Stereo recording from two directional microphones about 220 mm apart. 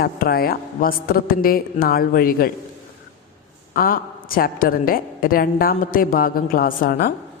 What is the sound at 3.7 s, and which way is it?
A woman's voice, 40° left (ahead or behind).